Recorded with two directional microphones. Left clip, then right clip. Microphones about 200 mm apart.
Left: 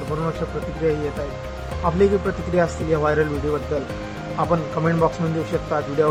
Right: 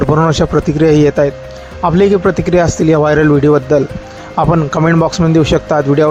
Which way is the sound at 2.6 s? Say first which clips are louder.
Right 8 dB; 45° right (ahead or behind).